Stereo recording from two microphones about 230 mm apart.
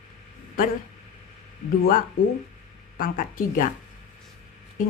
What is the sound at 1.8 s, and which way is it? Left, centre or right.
Speech, left.